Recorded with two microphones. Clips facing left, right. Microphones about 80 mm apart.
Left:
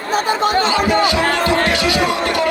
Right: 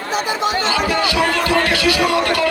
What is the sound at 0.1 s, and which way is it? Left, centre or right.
Speech, left.